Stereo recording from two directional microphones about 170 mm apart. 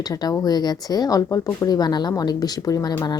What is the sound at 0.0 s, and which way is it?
Speech, 20° left (ahead or behind).